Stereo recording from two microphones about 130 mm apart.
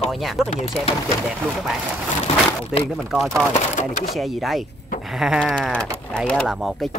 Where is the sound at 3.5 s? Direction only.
75° left (ahead or behind).